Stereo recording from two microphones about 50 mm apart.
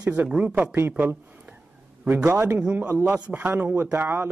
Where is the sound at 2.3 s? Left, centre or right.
Right.